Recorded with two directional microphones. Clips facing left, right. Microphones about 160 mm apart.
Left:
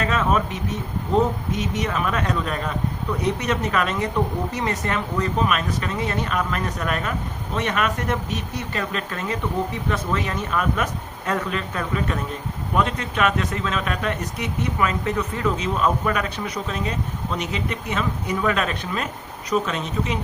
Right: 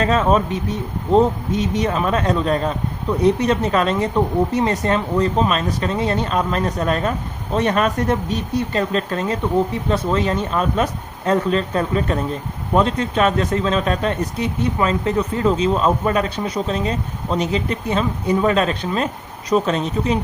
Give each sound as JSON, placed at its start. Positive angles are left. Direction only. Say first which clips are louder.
{"t": 0.0, "sound": "speech", "louder": "right 5 dB", "side_deg": -30}